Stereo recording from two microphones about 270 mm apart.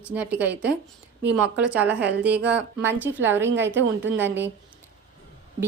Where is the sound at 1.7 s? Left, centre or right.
Centre.